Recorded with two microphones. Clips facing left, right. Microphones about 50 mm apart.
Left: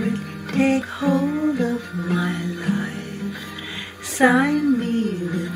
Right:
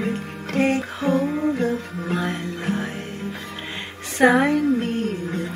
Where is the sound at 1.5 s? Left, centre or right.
Right.